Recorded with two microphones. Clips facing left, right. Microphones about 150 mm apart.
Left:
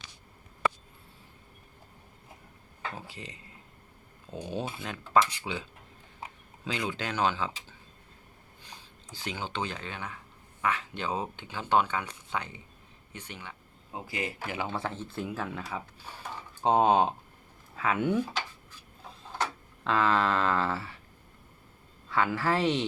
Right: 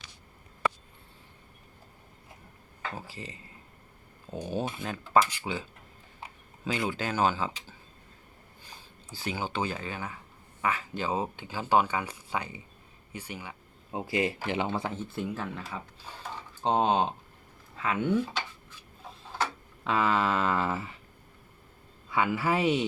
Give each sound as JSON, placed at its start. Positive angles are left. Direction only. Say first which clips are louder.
{"t": 2.9, "sound": "speech", "louder": "right 2 dB", "side_deg": 0}
{"t": 6.7, "sound": "speech", "louder": "right 2 dB", "side_deg": -5}
{"t": 9.0, "sound": "speech", "louder": "right 3 dB", "side_deg": -5}
{"t": 13.9, "sound": "speech", "louder": "right 7 dB", "side_deg": -25}
{"t": 15.1, "sound": "speech", "louder": "even", "side_deg": 0}
{"t": 19.4, "sound": "tick-tock", "louder": "right 1 dB", "side_deg": -5}
{"t": 22.1, "sound": "speech", "louder": "even", "side_deg": -10}